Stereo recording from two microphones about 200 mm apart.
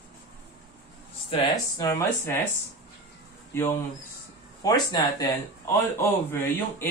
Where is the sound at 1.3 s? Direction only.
20° left (ahead or behind).